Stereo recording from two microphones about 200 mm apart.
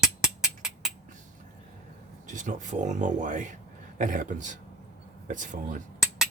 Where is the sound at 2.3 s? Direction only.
40° right (ahead or behind).